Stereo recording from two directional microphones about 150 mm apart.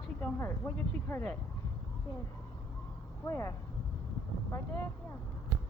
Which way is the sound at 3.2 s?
20° left (ahead or behind).